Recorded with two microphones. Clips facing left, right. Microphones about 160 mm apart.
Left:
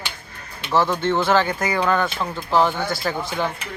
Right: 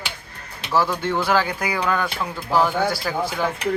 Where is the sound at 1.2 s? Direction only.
10° right (ahead or behind).